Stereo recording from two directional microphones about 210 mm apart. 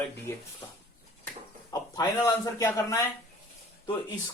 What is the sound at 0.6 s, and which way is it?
Speech, 15° left (ahead or behind).